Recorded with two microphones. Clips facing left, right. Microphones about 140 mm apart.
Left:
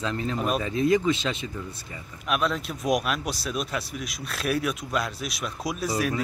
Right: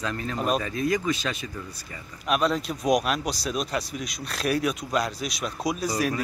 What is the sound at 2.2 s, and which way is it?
Speech, centre (ahead or behind).